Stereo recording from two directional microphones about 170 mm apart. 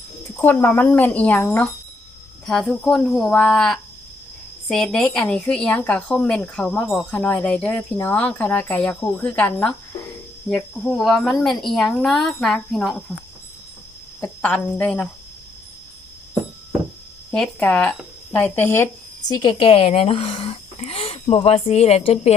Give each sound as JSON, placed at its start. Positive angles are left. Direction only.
{"t": 0.4, "sound": "speech", "side_deg": 15}
{"t": 14.2, "sound": "speech", "side_deg": 10}
{"t": 17.3, "sound": "speech", "side_deg": 5}
{"t": 19.3, "sound": "speech", "side_deg": 30}